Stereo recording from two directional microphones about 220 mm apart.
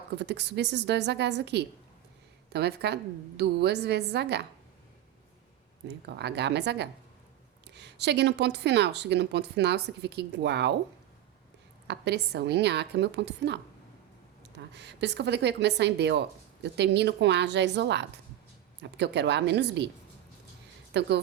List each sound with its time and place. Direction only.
0.2 s a woman's voice: 50° right (ahead or behind)
6.1 s a woman's voice: 50° right (ahead or behind)
11.9 s a woman's voice: 50° right (ahead or behind)
20.9 s a woman's voice: 50° right (ahead or behind)